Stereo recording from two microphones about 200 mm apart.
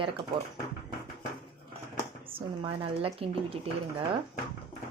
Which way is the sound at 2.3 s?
25° right (ahead or behind).